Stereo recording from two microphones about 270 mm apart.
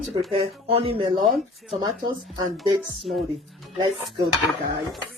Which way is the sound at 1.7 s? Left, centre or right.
Centre.